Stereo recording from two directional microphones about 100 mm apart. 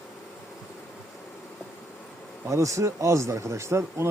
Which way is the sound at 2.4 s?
30° right (ahead or behind).